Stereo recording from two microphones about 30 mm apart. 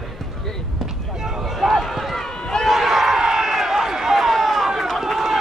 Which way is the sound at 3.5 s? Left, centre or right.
Centre.